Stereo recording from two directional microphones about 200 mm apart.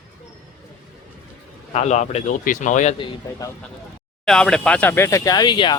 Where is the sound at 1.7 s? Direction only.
35° left (ahead or behind).